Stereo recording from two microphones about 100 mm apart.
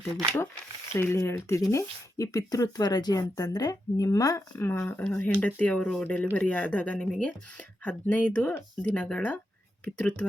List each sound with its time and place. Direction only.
0.9 s speech: 25° left (ahead or behind)
4.5 s speech: 20° left (ahead or behind)